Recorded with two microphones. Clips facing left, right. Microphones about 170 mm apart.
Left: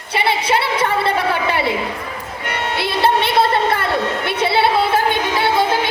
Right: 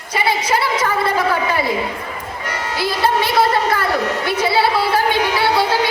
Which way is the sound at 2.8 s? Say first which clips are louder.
Even; 25° left (ahead or behind).